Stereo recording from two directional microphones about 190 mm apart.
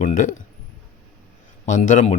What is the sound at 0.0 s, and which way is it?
Speech, 45° left (ahead or behind).